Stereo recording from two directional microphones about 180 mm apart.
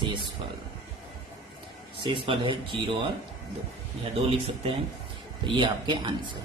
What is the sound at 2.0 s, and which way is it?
Speech, 30° right (ahead or behind).